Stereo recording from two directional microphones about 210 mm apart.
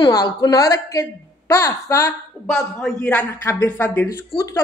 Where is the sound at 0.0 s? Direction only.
20° left (ahead or behind).